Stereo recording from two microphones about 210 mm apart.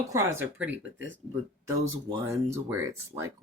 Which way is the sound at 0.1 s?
15° right (ahead or behind).